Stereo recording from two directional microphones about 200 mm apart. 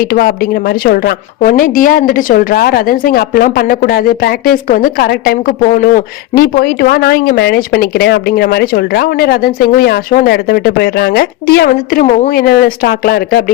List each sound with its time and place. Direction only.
0.0 s a woman's voice: 50° left (ahead or behind)